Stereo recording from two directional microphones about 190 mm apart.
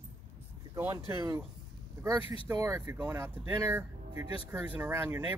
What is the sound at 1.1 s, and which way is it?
Speech, 20° right (ahead or behind).